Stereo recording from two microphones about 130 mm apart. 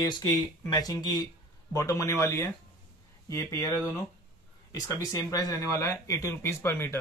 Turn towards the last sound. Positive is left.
turn(degrees=20)  # may be behind; listen again after turning